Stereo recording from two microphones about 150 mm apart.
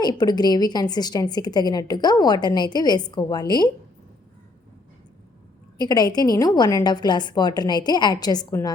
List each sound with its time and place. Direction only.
0.0 s a woman's voice: 30° left (ahead or behind)
5.8 s a woman's voice: 25° left (ahead or behind)